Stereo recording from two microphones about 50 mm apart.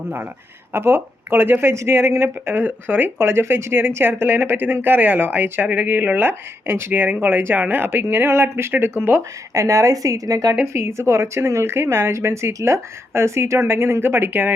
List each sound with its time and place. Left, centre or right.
0.7 s speech: right
1.7 s speech: right
2.6 s speech: right
6.9 s speech: right
7.9 s speech: right
9.6 s speech: right
10.7 s speech: right